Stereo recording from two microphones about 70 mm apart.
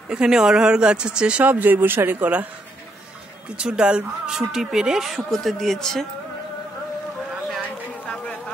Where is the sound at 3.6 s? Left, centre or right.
Centre.